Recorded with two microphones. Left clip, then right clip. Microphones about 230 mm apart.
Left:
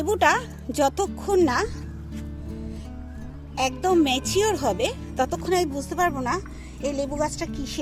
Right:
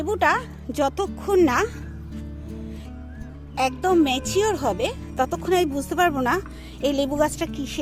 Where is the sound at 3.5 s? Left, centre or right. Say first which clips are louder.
Right 1 dB; centre.